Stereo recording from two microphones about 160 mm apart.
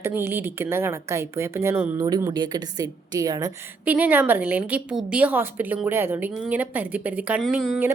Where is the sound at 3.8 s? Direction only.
10° right (ahead or behind).